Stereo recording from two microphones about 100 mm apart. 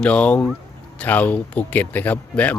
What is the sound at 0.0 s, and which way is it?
Speech, 10° left (ahead or behind).